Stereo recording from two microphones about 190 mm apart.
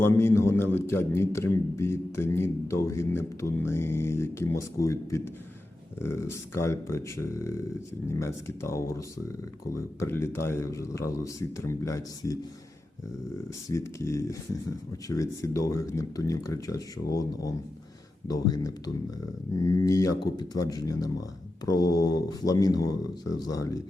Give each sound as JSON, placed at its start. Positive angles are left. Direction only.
{"t": 0.0, "sound": "a man's voice", "side_deg": 15}
{"t": 13.7, "sound": "a man's voice", "side_deg": 15}